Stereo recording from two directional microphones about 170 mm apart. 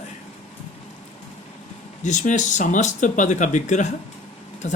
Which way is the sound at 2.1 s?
45° left (ahead or behind).